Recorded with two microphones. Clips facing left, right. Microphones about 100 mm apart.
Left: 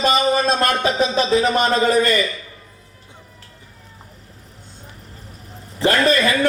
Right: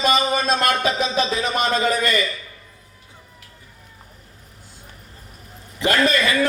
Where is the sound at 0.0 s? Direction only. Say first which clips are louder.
Left 3 dB; 30° left (ahead or behind).